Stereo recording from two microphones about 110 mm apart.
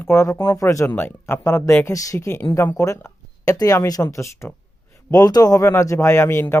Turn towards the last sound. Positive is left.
turn(degrees=25)  # may be behind; listen again after turning